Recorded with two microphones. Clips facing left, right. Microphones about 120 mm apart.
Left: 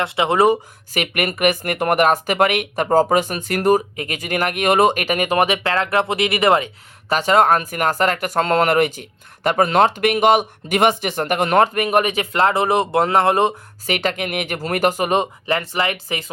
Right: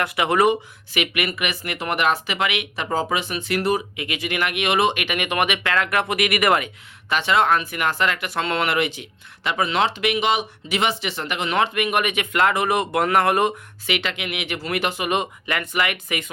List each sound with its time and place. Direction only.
0.0 s speech: 25° left (ahead or behind)
7.1 s speech: 40° left (ahead or behind)
13.8 s speech: 40° left (ahead or behind)